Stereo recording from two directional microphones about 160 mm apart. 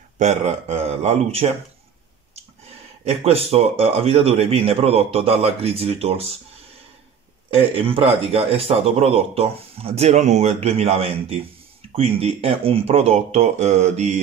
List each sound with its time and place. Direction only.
0.2 s speech: 45° right (ahead or behind)
3.3 s a man's voice: 40° right (ahead or behind)
7.5 s a man's voice: 35° right (ahead or behind)